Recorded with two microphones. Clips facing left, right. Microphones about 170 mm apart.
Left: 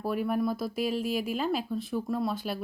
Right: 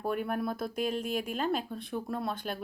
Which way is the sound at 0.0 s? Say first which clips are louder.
Left 3 dB; 5° left (ahead or behind).